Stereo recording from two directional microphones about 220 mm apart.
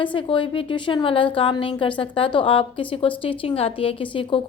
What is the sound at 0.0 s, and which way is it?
A woman's voice, 20° left (ahead or behind).